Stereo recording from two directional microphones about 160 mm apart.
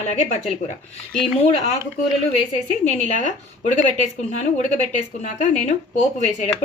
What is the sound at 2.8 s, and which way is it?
Speech, 45° left (ahead or behind).